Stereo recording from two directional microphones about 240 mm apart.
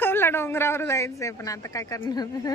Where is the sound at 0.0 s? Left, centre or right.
Centre.